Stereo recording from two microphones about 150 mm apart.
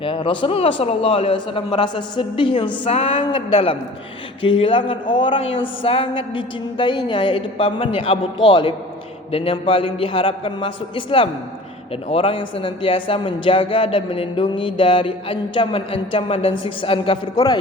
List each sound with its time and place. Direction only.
0.0 s a man's voice: 35° left (ahead or behind)
17.3 s a man's voice: 25° left (ahead or behind)